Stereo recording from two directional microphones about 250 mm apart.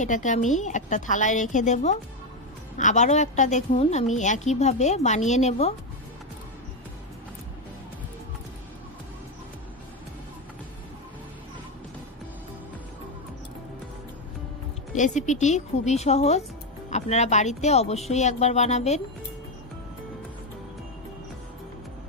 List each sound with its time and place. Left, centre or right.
0.0 s a woman's voice: left
15.0 s a woman's voice: left